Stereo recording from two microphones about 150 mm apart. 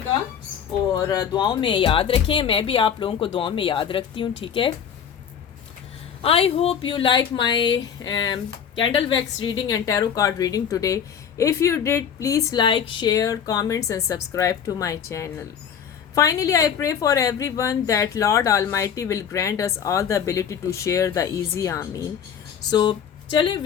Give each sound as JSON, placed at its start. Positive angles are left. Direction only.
{"t": 1.0, "sound": "speech", "side_deg": 25}
{"t": 6.2, "sound": "a woman's voice", "side_deg": 40}
{"t": 22.7, "sound": "speech", "side_deg": 30}